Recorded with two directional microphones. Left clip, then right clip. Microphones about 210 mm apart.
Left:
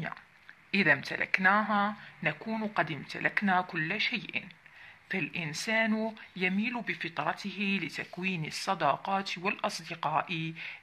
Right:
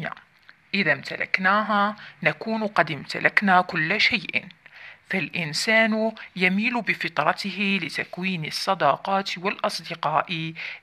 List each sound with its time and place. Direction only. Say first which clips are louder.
0.7 s speech: right 3 dB; 15° right (ahead or behind)